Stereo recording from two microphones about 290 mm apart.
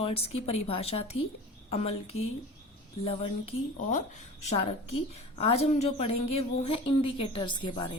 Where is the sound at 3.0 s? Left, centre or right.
Centre.